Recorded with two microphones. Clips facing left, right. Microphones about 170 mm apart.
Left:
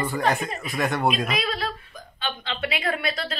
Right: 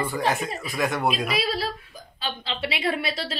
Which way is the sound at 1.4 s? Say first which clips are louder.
Right 1 dB; 35° right (ahead or behind).